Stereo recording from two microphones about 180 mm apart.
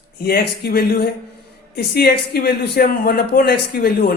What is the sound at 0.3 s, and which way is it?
A man's voice, 60° left (ahead or behind).